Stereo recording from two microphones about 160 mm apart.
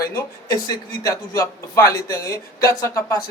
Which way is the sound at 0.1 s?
25° left (ahead or behind).